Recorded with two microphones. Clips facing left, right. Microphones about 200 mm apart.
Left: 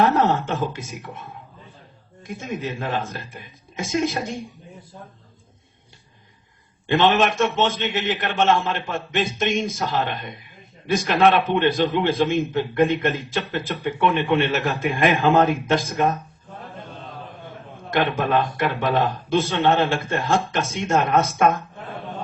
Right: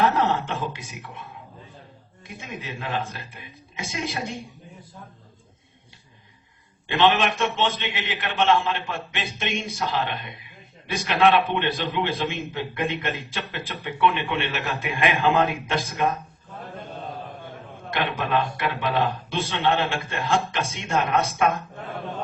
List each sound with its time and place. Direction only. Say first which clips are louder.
0.0 s a man's voice: left 3 dB; 45° left (ahead or behind)
6.8 s a man's voice: left 3 dB; 45° left (ahead or behind)
17.9 s a man's voice: left 4 dB; 45° left (ahead or behind)